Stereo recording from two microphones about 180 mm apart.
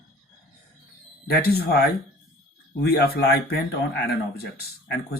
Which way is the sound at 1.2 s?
60° left (ahead or behind).